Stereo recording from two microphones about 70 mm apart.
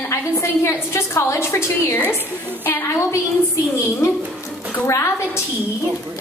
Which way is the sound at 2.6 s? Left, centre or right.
Left.